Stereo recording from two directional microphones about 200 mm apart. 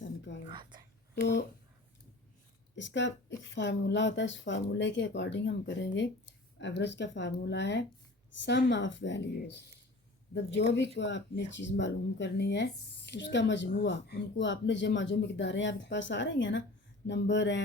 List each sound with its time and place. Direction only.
0.5 s a sound: 20° right (ahead or behind)
1.1 s speech: 60° left (ahead or behind)
2.7 s speech: 65° left (ahead or behind)